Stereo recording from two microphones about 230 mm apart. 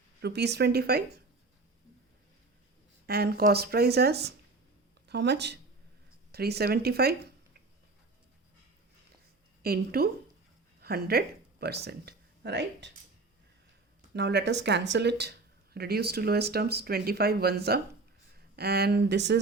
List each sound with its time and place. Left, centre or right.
0.2 s speech: right
3.1 s speech: right
9.6 s a woman's voice: right
10.8 s a sound: right
11.6 s speech: right
14.1 s speech: right